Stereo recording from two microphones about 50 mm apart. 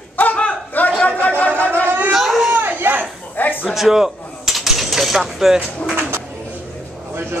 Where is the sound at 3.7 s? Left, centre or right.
Centre.